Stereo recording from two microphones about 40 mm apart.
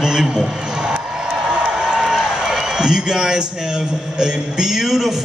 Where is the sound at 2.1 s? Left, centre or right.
Centre.